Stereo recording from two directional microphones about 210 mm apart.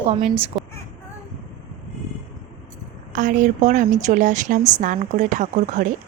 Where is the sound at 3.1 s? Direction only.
35° right (ahead or behind).